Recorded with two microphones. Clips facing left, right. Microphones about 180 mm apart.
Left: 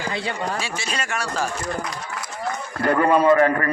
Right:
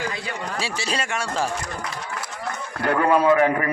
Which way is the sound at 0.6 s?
30° right (ahead or behind).